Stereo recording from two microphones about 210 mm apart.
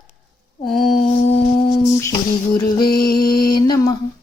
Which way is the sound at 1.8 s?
15° left (ahead or behind).